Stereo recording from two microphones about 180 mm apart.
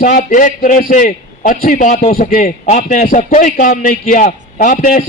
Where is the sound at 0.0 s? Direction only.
45° left (ahead or behind).